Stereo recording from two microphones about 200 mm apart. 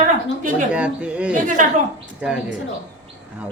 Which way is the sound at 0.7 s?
5° right (ahead or behind).